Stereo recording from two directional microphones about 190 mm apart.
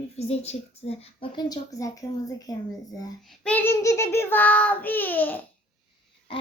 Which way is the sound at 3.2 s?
5° left (ahead or behind).